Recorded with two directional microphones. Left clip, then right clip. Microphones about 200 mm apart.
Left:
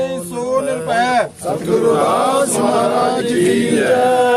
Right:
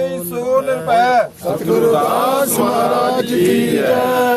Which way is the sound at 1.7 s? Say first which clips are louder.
Even; 55° right (ahead or behind).